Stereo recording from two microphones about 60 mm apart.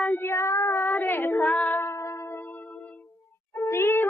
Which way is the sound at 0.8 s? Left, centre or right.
Left.